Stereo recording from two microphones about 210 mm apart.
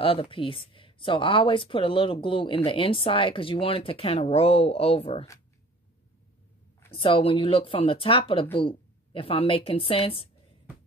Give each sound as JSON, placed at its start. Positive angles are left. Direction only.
{"t": 0.0, "sound": "speech", "side_deg": 25}
{"t": 6.9, "sound": "speech", "side_deg": 25}